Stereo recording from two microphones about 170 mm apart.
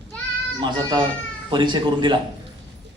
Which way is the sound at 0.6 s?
25° right (ahead or behind).